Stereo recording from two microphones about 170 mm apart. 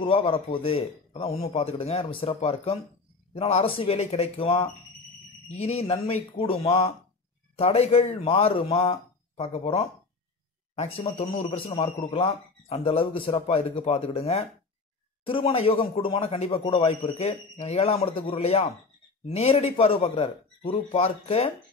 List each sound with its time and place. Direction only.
0.0 s speech: 35° left (ahead or behind)